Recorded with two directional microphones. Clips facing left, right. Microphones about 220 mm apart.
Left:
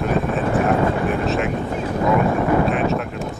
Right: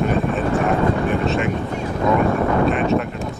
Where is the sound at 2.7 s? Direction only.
Centre (ahead or behind).